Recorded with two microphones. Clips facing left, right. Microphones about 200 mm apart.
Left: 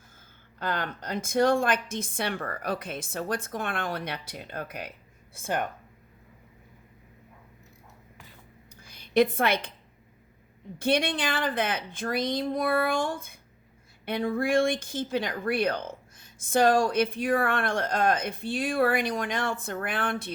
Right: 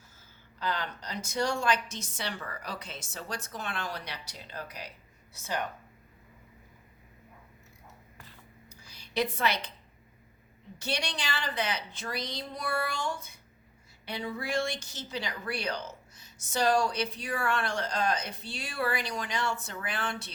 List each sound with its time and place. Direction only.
0.6 s speech: 55° left (ahead or behind)
8.7 s a sound: 55° left (ahead or behind)
10.8 s speech: 55° left (ahead or behind)